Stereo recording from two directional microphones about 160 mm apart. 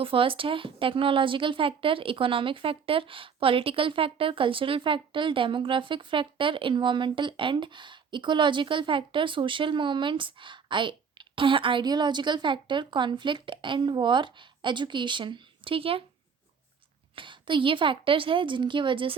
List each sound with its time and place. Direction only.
0.0 s a woman's voice: 35° right (ahead or behind)
17.2 s a woman's voice: 30° right (ahead or behind)